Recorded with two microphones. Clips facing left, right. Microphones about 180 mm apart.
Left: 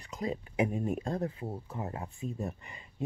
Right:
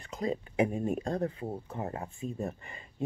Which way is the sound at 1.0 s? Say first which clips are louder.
Right 2 dB; 50° right (ahead or behind).